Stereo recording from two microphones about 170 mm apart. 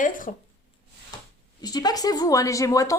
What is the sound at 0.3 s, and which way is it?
Speech, 50° left (ahead or behind).